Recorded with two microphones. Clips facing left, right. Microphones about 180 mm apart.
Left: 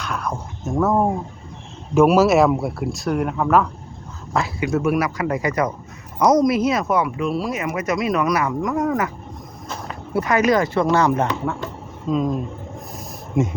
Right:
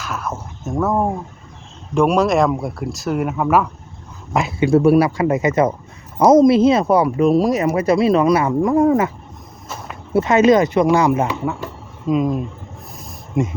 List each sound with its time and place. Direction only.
0.0 s speech: 5° right (ahead or behind)
4.4 s speech: 25° right (ahead or behind)
9.6 s a sound: 5° right (ahead or behind)
10.1 s speech: 25° right (ahead or behind); by 13.5 s centre (ahead or behind)